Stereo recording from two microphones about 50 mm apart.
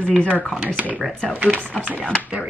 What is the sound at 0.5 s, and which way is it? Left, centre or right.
Speech, right.